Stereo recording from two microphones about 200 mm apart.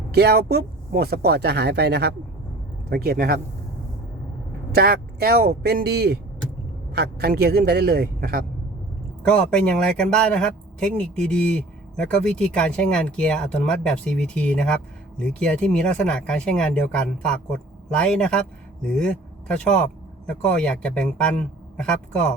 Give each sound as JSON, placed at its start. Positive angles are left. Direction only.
{"t": 0.1, "sound": "speech", "side_deg": -55}
{"t": 4.7, "sound": "speech", "side_deg": -50}
{"t": 9.2, "sound": "a man's voice", "side_deg": 5}